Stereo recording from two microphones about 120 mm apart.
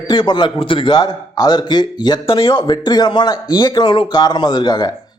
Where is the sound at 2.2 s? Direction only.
50° left (ahead or behind).